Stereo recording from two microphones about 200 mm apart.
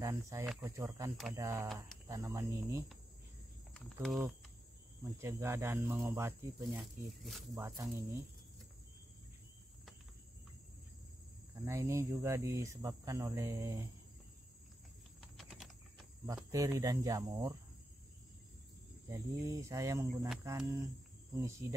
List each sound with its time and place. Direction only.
0.0 s speech: 15° right (ahead or behind)
1.1 s speech: centre (ahead or behind)
1.4 s speech: 15° right (ahead or behind)
3.7 s speech: centre (ahead or behind)
5.2 s speech: 10° right (ahead or behind)
6.6 s speech: centre (ahead or behind)
7.5 s speech: 15° right (ahead or behind)
11.6 s speech: 15° right (ahead or behind)
15.1 s typing: centre (ahead or behind)
16.5 s speech: 15° right (ahead or behind)
19.0 s speech: 15° right (ahead or behind)